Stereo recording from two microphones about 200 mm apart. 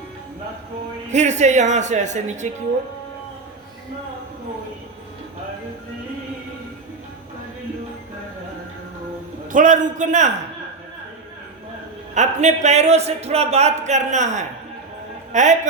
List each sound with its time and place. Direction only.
1.1 s a man's voice: 35° right (ahead or behind)
9.5 s a man's voice: 40° right (ahead or behind)
12.1 s a man's voice: 35° right (ahead or behind)